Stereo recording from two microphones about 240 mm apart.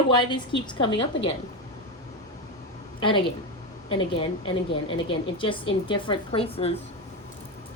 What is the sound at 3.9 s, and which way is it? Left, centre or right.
A woman's voice, left.